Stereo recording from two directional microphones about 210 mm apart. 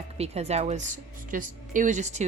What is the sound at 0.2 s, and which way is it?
A woman's voice, 30° right (ahead or behind).